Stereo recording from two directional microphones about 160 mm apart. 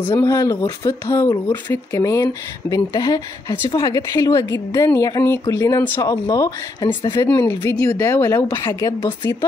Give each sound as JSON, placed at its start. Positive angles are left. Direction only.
{"t": 0.1, "sound": "speech", "side_deg": 15}